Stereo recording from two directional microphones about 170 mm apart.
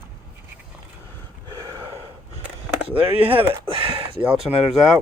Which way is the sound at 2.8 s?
35° right (ahead or behind).